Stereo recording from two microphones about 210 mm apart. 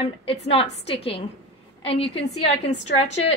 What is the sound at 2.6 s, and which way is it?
Speech, 30° left (ahead or behind).